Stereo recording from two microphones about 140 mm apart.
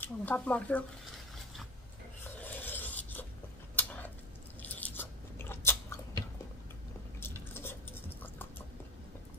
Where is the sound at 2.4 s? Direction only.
15° left (ahead or behind).